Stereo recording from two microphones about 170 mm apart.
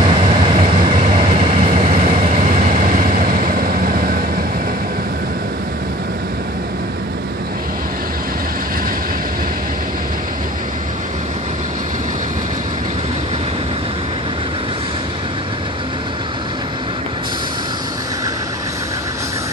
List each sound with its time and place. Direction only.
0.0 s vehicle: 30° right (ahead or behind)
1.7 s vehicle: 50° right (ahead or behind)